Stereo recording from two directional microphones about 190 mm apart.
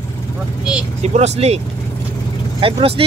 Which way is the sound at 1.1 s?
35° right (ahead or behind).